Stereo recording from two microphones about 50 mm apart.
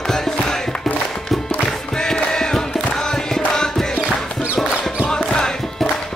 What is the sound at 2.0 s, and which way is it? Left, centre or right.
Music, centre.